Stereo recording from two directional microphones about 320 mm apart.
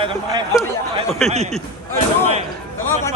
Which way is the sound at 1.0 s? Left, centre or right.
Centre.